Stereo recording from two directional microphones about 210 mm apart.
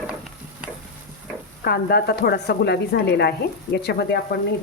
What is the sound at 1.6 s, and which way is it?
Speech, 45° left (ahead or behind).